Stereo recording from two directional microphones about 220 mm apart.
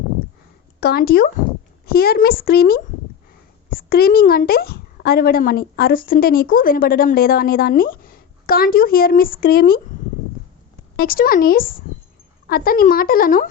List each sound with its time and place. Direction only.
0.8 s a woman's voice: 45° left (ahead or behind)
10.9 s speech: 40° left (ahead or behind)